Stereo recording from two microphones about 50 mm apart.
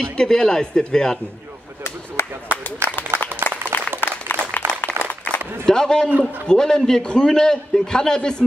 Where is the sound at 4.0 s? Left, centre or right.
Left.